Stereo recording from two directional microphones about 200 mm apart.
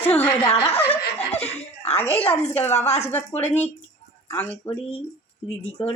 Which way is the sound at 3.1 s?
10° left (ahead or behind).